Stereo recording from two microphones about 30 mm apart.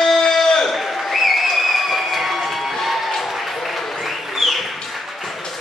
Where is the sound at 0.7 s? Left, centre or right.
Centre.